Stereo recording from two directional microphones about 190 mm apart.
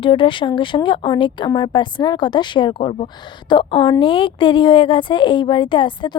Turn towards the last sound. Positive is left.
turn(degrees=25)  # may be behind; listen again after turning